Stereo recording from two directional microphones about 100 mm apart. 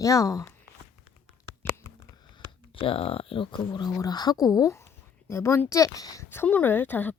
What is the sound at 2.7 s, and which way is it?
Speech, 65° left (ahead or behind).